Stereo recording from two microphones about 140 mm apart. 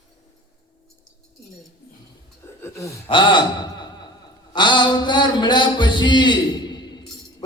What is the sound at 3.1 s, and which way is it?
A man's voice, 35° left (ahead or behind).